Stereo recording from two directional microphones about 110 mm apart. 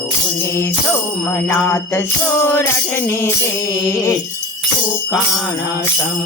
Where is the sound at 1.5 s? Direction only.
20° left (ahead or behind).